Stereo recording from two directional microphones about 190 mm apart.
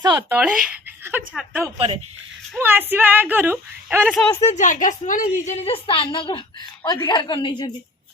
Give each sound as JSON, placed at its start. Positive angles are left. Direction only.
{"t": 0.0, "sound": "speech", "side_deg": -20}
{"t": 0.3, "sound": "a woman's voice", "side_deg": -5}
{"t": 4.4, "sound": "speech", "side_deg": 35}
{"t": 5.5, "sound": "a woman's voice", "side_deg": 35}